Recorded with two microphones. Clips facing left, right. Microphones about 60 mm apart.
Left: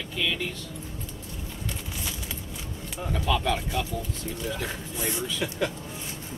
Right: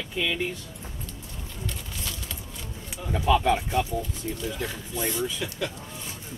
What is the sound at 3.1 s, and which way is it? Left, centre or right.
Speech, centre.